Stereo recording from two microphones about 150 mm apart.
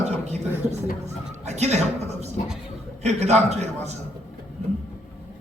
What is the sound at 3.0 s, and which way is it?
Speech, 50° right (ahead or behind).